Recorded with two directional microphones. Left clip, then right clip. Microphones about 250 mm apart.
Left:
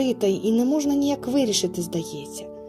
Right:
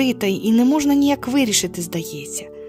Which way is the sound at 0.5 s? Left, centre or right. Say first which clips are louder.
Right 5 dB; right.